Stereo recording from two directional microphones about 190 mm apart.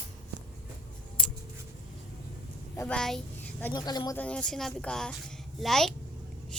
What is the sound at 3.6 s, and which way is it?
Speech, 20° left (ahead or behind).